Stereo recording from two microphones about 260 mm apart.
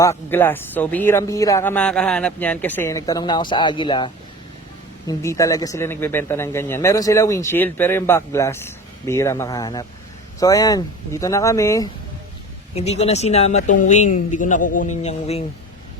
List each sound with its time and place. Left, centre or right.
0.0 s speech: centre
12.7 s speech: left